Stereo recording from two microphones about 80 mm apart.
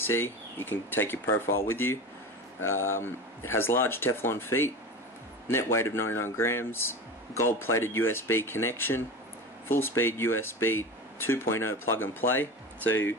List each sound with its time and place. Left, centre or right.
0.0 s speech: left